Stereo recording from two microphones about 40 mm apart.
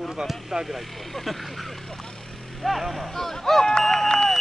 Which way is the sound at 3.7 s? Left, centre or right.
Centre.